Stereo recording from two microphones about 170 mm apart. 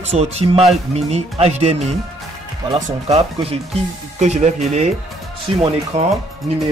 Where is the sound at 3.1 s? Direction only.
35° right (ahead or behind).